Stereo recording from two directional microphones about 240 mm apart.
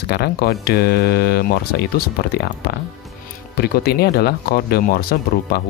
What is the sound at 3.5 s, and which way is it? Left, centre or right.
Speech, left.